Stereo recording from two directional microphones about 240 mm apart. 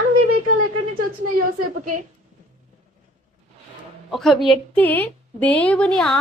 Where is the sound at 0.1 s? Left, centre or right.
Right.